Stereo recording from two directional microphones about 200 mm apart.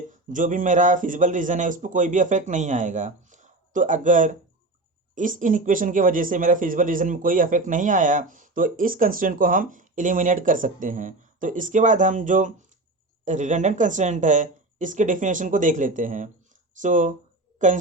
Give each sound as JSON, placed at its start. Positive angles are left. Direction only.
{"t": 0.3, "sound": "speech", "side_deg": -40}